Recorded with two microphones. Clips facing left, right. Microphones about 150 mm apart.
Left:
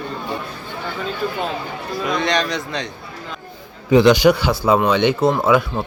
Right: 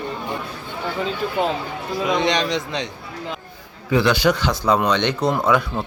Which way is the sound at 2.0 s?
20° right (ahead or behind).